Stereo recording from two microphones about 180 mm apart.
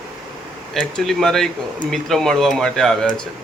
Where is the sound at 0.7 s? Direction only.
5° left (ahead or behind).